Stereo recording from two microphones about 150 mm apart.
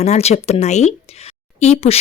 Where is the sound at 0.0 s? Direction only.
45° left (ahead or behind).